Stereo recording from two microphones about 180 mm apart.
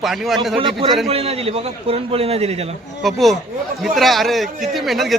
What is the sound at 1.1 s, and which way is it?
A man's voice, 35° right (ahead or behind).